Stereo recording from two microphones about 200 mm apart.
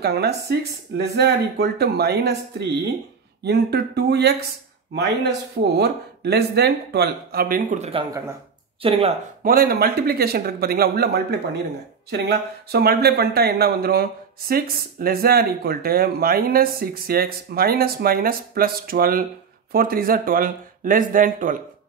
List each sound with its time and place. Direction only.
0.0 s speech: 55° right (ahead or behind)
3.4 s speech: 55° right (ahead or behind)
5.8 s speech: 55° right (ahead or behind); by 9.0 s 30° right (ahead or behind)
9.4 s speech: 45° right (ahead or behind)